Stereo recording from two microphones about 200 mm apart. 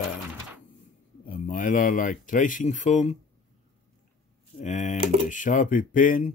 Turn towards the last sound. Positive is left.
turn(degrees=40)  # may be behind; listen again after turning